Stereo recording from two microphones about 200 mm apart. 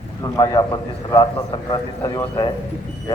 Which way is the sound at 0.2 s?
15° left (ahead or behind).